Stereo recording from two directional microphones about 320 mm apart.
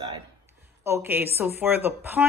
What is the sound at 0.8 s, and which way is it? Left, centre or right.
Speech, centre.